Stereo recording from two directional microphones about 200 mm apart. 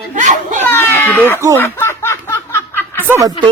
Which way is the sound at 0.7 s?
10° left (ahead or behind).